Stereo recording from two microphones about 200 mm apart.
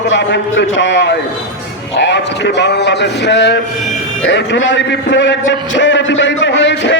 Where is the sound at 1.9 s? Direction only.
65° left (ahead or behind).